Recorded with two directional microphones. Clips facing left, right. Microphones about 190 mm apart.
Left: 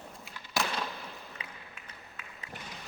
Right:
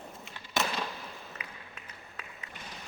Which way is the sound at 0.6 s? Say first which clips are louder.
Right 1 dB; centre (ahead or behind).